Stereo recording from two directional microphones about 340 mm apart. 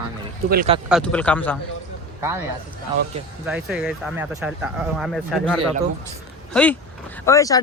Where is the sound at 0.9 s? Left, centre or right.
Centre.